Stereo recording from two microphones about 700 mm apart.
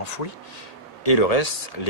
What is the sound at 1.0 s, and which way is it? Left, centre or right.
Speech, left.